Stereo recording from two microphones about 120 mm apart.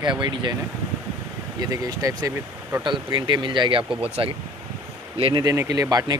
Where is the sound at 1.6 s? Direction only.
30° right (ahead or behind).